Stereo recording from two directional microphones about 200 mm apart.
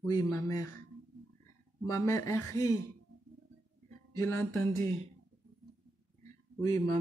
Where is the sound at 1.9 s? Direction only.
15° left (ahead or behind).